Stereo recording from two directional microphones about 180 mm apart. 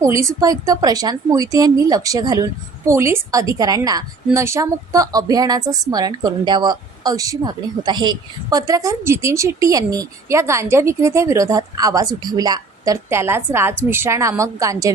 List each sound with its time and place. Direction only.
0.0 s a woman's voice: 15° right (ahead or behind)